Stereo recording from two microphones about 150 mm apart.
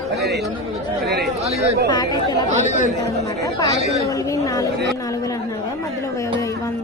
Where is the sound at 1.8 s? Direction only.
25° left (ahead or behind).